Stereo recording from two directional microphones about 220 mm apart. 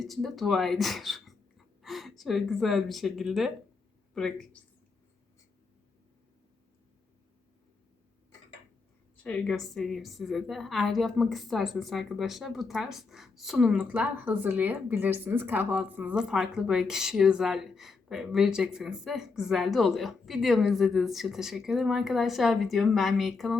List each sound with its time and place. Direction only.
0.0 s a woman's voice: centre (ahead or behind)
9.2 s a woman's voice: 5° left (ahead or behind)